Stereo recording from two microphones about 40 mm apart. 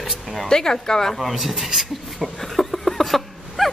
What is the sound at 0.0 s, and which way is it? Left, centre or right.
Speech, centre.